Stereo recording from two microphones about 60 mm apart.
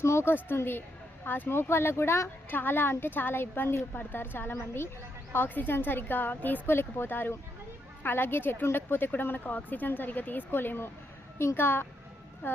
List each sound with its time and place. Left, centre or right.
0.0 s speech: left
2.5 s speech: left